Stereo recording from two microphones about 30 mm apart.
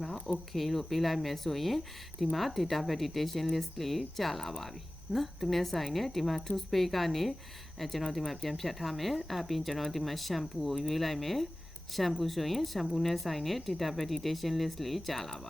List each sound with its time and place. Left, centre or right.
0.5 s speech: centre